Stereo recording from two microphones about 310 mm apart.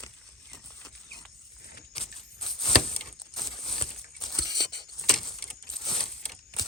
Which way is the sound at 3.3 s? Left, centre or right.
Centre.